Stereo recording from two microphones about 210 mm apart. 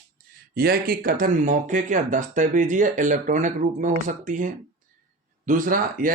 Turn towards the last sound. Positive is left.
turn(degrees=-40)  # may be behind; listen again after turning